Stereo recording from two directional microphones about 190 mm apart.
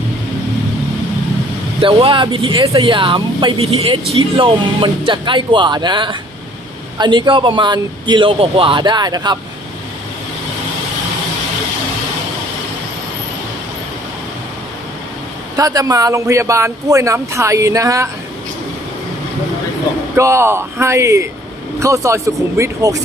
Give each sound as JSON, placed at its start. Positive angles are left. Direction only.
{"t": 1.8, "sound": "speech", "side_deg": -25}
{"t": 15.5, "sound": "speech", "side_deg": -20}
{"t": 20.1, "sound": "speech", "side_deg": -15}